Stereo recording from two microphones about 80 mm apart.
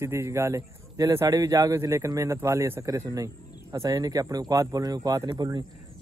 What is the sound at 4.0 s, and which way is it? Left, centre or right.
Speech, right.